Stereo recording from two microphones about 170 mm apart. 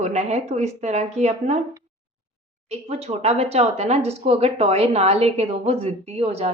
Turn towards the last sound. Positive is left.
turn(degrees=-35)  # may be behind; listen again after turning